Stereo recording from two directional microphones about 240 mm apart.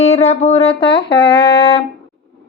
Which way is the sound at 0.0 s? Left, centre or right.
Left.